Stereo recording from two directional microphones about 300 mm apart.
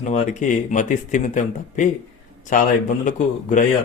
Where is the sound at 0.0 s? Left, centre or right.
Left.